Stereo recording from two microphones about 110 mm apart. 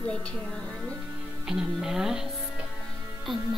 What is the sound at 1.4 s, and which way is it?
Speech, 5° right (ahead or behind).